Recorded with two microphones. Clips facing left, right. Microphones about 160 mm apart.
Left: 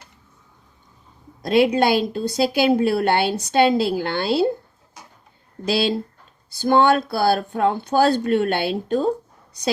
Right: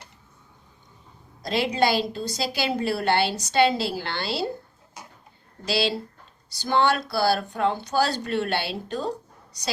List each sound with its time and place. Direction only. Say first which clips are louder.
1.4 s speech: left 6 dB; 55° left (ahead or behind)
5.6 s speech: left 4 dB; 50° left (ahead or behind)